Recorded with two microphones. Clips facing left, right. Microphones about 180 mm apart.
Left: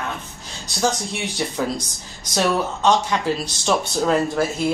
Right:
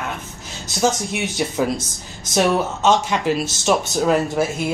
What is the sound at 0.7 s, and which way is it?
Speech, 20° right (ahead or behind).